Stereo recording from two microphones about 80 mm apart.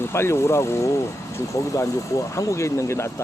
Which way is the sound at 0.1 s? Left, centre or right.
Left.